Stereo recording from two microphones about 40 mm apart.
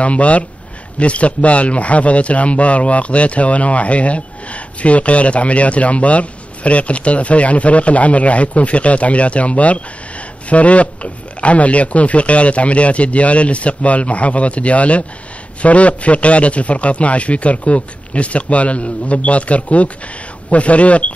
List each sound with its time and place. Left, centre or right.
0.0 s speech: left